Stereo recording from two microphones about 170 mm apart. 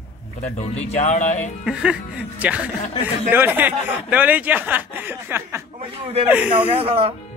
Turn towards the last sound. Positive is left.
turn(degrees=-35)  # may be behind; listen again after turning